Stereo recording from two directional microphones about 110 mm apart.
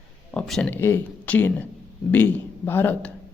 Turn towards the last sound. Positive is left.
turn(degrees=15)  # may be behind; listen again after turning